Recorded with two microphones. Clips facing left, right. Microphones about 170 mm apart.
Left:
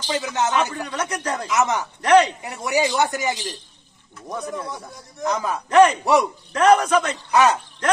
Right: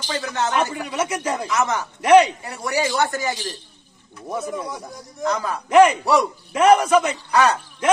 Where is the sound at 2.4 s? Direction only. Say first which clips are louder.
Left 2 dB; 20° left (ahead or behind).